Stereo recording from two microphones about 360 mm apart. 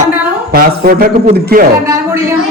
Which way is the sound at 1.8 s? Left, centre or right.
Centre.